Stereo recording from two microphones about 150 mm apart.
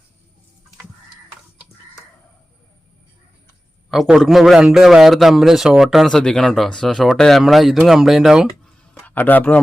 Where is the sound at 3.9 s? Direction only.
Centre (ahead or behind).